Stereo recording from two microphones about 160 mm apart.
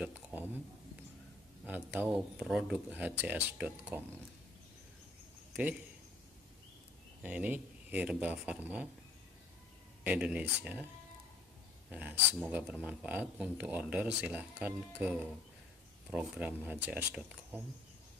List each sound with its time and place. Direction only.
0.0 s a sound: 10° right (ahead or behind)
1.7 s speech: 10° right (ahead or behind)
7.2 s speech: 10° right (ahead or behind)
10.0 s speech: 10° right (ahead or behind)
11.9 s speech: 10° right (ahead or behind)